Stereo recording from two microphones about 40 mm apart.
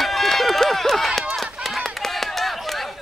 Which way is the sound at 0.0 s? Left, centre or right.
Centre.